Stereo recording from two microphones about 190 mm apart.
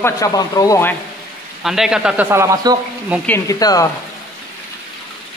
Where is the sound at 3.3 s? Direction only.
20° left (ahead or behind).